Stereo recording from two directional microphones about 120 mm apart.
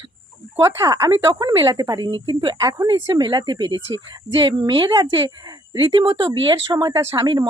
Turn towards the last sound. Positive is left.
turn(degrees=-40)  # may be behind; listen again after turning